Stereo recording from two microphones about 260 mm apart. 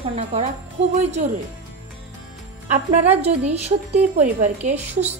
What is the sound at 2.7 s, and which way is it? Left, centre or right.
A woman's voice, right.